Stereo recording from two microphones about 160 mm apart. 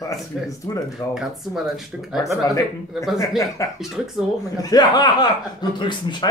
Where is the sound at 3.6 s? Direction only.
20° left (ahead or behind).